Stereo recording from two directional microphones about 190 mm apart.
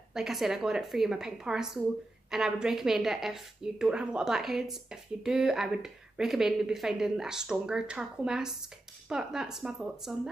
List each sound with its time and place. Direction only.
0.1 s a woman's voice: centre (ahead or behind)